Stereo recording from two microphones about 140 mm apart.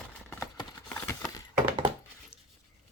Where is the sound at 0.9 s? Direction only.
15° left (ahead or behind).